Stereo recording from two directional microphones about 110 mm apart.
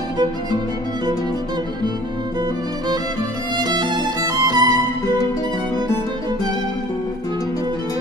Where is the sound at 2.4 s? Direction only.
40° right (ahead or behind).